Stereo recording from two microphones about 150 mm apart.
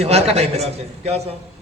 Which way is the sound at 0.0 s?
45° right (ahead or behind).